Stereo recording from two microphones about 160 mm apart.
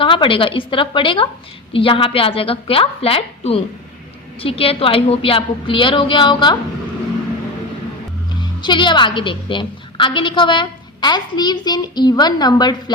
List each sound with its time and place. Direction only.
0.0 s a woman's voice: 30° left (ahead or behind)
8.4 s a woman's voice: 30° left (ahead or behind)